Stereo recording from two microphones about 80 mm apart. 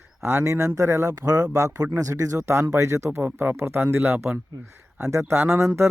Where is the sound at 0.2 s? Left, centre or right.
Right.